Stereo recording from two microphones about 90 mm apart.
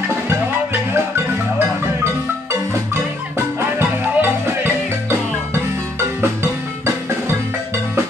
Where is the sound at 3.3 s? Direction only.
25° right (ahead or behind).